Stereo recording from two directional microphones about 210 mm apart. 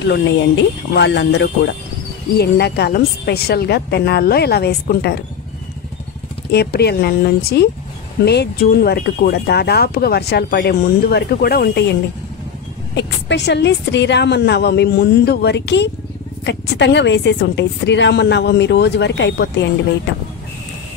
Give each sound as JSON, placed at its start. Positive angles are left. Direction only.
{"t": 0.0, "sound": "a woman's voice", "side_deg": 60}
{"t": 6.5, "sound": "speech", "side_deg": 50}
{"t": 12.9, "sound": "a woman's voice", "side_deg": 55}